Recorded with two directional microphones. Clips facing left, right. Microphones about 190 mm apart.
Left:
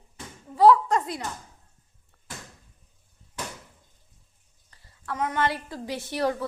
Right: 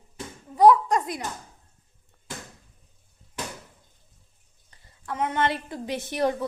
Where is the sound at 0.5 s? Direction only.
15° right (ahead or behind).